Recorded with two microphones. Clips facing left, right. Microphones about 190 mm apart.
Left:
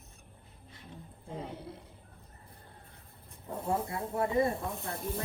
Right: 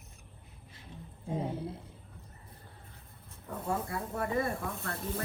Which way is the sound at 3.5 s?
30° left (ahead or behind).